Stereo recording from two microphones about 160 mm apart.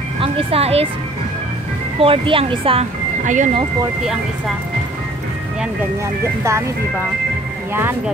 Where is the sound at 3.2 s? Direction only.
50° right (ahead or behind).